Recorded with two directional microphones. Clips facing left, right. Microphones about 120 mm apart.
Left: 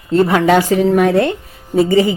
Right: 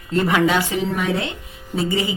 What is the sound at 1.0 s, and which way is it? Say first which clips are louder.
Speech: left 10 dB; 55° left (ahead or behind).